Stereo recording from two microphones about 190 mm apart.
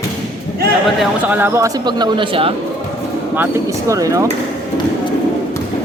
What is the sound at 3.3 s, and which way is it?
Speech, 15° right (ahead or behind).